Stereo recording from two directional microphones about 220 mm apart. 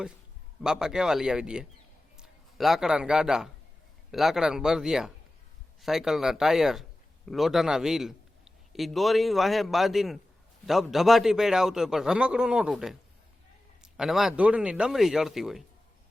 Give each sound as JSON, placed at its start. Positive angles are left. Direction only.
{"t": 0.6, "sound": "a man's voice", "side_deg": -5}